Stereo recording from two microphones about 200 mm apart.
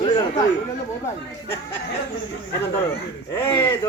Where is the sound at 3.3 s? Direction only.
15° left (ahead or behind).